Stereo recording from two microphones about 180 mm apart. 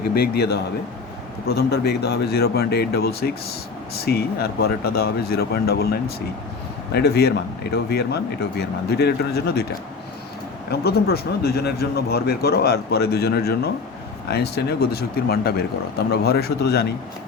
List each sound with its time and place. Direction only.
0.1 s speech: 60° left (ahead or behind)
10.7 s speech: 60° left (ahead or behind)